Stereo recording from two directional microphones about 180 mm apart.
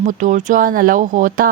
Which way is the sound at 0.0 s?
45° right (ahead or behind).